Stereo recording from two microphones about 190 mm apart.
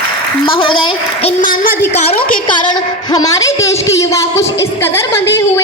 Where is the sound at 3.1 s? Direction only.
20° left (ahead or behind).